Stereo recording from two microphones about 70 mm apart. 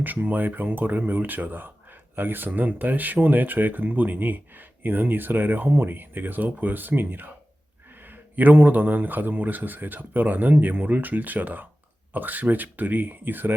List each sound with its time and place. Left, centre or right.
0.0 s speech: right